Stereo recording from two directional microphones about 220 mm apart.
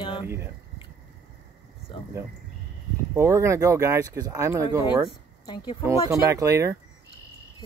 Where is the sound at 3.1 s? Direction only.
15° right (ahead or behind).